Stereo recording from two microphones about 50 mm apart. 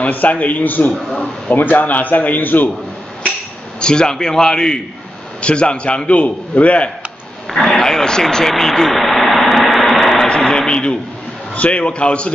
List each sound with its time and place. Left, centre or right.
0.0 s a man's voice: left
3.8 s a man's voice: centre
7.4 s speech: centre
9.6 s a sound: centre
10.2 s a sound: centre
11.5 s a man's voice: left